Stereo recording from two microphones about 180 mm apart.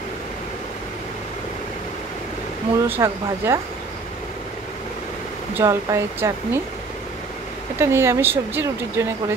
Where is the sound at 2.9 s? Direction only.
15° right (ahead or behind).